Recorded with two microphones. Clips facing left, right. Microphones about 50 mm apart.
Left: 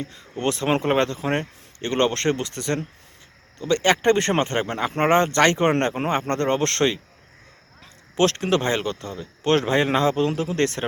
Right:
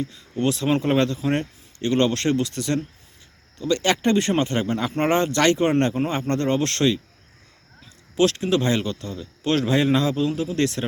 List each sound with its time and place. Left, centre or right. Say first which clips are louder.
0.0 s a man's voice: right 2 dB; left
8.1 s a man's voice: even; left
8.6 s a man's voice: right 1 dB; left